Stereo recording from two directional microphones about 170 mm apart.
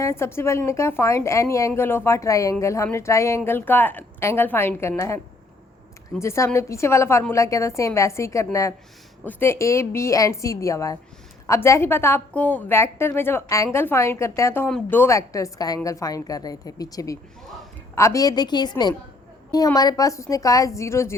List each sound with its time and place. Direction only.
0.0 s a woman's voice: 15° left (ahead or behind)
6.2 s a woman's voice: 15° left (ahead or behind)